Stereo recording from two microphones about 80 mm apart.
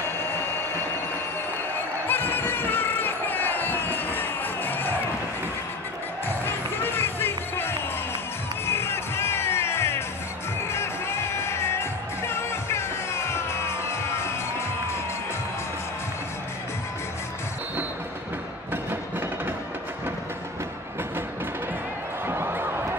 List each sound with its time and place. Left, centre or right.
2.0 s crowd: left
6.2 s music: left
18.7 s music: right
22.3 s a sound: right